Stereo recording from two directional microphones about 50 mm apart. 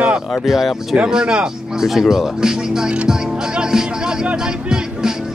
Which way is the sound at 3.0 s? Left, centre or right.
Centre.